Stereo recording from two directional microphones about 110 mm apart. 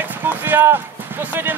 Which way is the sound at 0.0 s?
20° right (ahead or behind).